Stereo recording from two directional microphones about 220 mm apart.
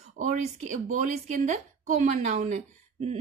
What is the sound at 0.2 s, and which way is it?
A woman's voice, 35° right (ahead or behind).